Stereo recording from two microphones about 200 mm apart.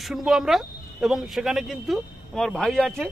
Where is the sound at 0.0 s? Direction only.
Centre (ahead or behind).